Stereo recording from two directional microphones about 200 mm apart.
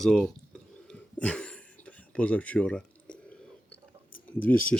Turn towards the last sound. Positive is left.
turn(degrees=10)  # may be behind; listen again after turning